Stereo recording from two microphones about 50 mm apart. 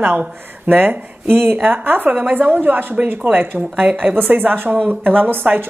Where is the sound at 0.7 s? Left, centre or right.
Right.